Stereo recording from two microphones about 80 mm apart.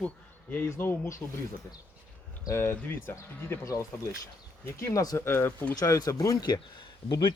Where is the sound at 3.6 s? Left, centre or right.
Left.